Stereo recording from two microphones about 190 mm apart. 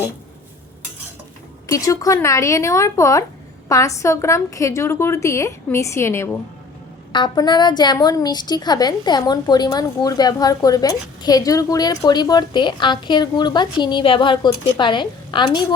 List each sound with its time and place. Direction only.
1.6 s a woman's voice: 15° left (ahead or behind)